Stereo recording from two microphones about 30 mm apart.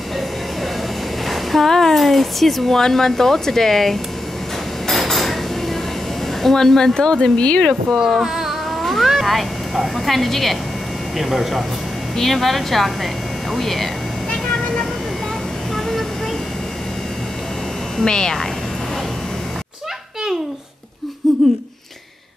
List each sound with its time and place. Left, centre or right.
1.3 s a sound: centre
1.7 s speech: centre
2.0 s a woman's voice: centre
4.9 s dishes: centre
6.5 s speech: centre
6.9 s speech: left
7.3 s speech: left
8.0 s a sound: centre
9.0 s a woman's voice: centre
11.1 s a woman's voice: centre
12.2 s a woman's voice: centre
15.7 s vehicle: centre
18.0 s speech: left
21.2 s laughter: centre